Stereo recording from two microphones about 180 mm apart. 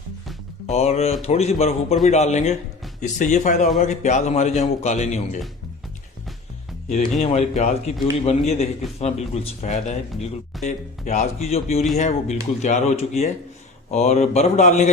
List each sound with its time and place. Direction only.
0.7 s speech: 35° left (ahead or behind)
6.8 s speech: 40° left (ahead or behind)